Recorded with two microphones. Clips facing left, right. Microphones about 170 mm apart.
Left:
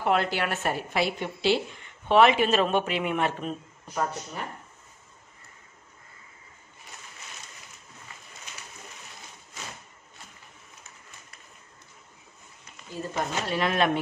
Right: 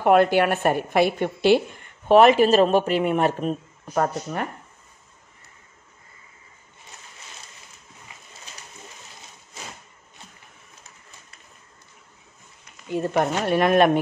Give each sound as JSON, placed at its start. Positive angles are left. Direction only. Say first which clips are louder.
{"t": 0.0, "sound": "a woman's voice", "louder": "right 9 dB", "side_deg": -55}
{"t": 3.9, "sound": "speech", "louder": "right 7 dB", "side_deg": -60}
{"t": 8.5, "sound": "a sound", "louder": "even", "side_deg": -30}
{"t": 12.9, "sound": "a woman's voice", "louder": "right 8 dB", "side_deg": -65}